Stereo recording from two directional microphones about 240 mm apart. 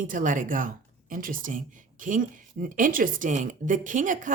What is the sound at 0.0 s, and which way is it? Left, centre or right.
Speech, right.